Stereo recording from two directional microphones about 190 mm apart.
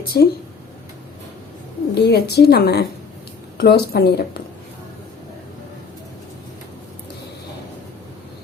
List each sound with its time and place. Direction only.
0.0 s speech: 55° left (ahead or behind)
2.0 s speech: 60° left (ahead or behind)